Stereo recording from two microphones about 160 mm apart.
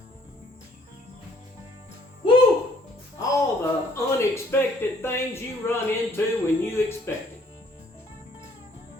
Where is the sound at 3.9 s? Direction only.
15° left (ahead or behind).